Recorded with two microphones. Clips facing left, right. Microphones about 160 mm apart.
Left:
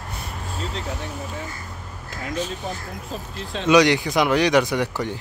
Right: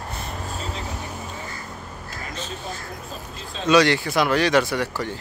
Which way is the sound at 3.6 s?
15° left (ahead or behind).